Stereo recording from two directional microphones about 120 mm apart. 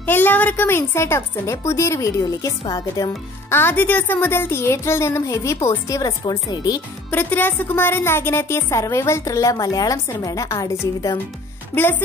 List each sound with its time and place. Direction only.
0.0 s a woman's voice: 15° left (ahead or behind); by 3.1 s 35° left (ahead or behind)
3.4 s a woman's voice: 20° left (ahead or behind); by 6.8 s 35° left (ahead or behind)
7.1 s a woman's voice: 15° left (ahead or behind)
11.7 s speech: 15° left (ahead or behind)